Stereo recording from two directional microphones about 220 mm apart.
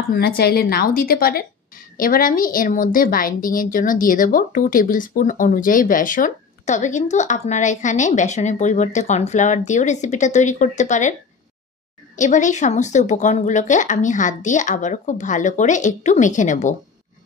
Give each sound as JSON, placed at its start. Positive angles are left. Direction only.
{"t": 0.1, "sound": "a woman's voice", "side_deg": 45}
{"t": 12.2, "sound": "a woman's voice", "side_deg": 35}